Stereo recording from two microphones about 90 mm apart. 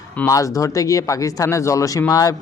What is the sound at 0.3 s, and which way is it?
Speech, 35° left (ahead or behind).